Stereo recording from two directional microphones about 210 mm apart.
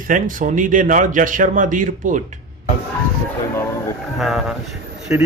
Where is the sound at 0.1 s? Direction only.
40° right (ahead or behind).